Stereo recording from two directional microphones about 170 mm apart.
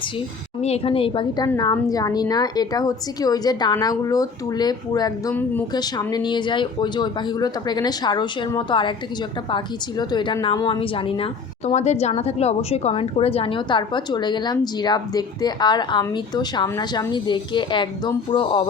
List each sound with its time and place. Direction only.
0.6 s a woman's voice: 35° left (ahead or behind)
5.3 s speech: 10° left (ahead or behind)
5.7 s a woman's voice: 25° left (ahead or behind)
10.0 s a woman's voice: 25° left (ahead or behind)